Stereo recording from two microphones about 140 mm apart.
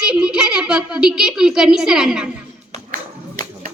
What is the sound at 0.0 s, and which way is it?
A child's voice, 5° right (ahead or behind).